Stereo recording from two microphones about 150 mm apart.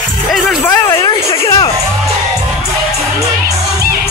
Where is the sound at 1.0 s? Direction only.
35° left (ahead or behind).